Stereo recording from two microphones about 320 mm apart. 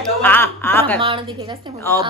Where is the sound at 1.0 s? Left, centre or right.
Centre.